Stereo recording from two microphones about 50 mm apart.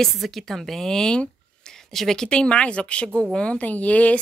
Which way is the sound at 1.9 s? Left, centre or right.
Centre.